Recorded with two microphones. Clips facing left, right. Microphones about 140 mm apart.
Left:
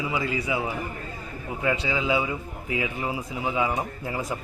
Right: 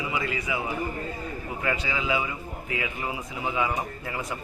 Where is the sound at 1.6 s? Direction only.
25° left (ahead or behind).